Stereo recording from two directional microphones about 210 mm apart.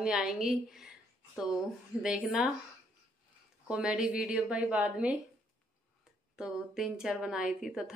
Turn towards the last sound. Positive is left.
turn(degrees=-5)  # may be behind; listen again after turning